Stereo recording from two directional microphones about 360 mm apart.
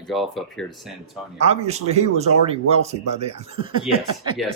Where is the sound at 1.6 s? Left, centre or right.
Centre.